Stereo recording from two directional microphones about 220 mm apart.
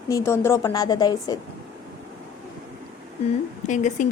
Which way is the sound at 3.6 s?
35° left (ahead or behind).